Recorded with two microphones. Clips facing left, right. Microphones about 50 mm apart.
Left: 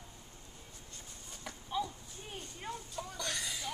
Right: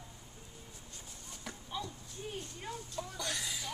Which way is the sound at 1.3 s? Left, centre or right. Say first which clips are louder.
Left 2 dB; centre.